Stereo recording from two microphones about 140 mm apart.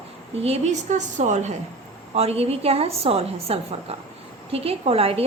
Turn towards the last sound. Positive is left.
turn(degrees=-45)  # may be behind; listen again after turning